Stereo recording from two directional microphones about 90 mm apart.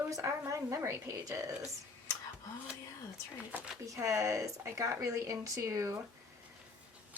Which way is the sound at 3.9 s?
35° right (ahead or behind).